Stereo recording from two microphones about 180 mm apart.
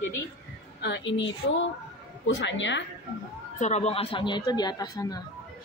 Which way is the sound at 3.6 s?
40° left (ahead or behind).